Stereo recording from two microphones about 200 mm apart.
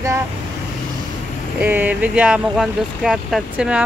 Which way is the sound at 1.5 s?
10° right (ahead or behind).